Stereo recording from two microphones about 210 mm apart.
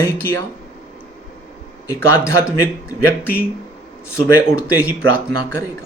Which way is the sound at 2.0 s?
10° left (ahead or behind).